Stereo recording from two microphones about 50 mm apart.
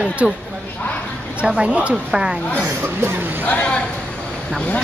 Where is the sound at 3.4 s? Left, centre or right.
Left.